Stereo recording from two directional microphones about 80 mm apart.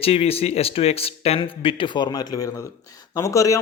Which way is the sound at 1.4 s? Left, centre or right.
Left.